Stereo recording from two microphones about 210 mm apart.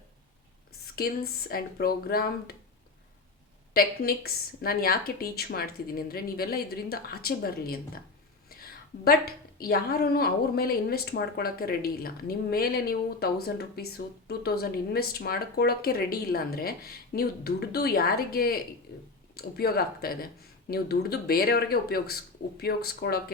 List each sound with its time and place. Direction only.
0.9 s a woman's voice: 45° left (ahead or behind)
3.8 s a woman's voice: 45° left (ahead or behind)
9.0 s a woman's voice: 45° left (ahead or behind)